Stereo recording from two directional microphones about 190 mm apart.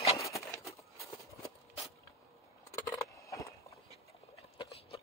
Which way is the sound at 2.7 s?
15° left (ahead or behind).